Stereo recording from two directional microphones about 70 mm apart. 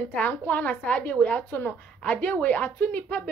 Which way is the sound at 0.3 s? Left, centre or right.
Left.